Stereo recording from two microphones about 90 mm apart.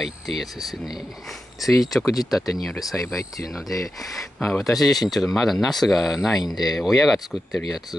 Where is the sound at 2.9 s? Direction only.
20° left (ahead or behind).